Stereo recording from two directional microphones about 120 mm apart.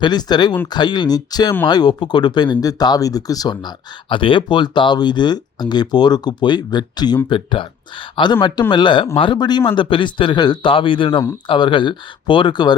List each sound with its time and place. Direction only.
0.0 s speech: 35° left (ahead or behind)
4.1 s speech: 45° left (ahead or behind)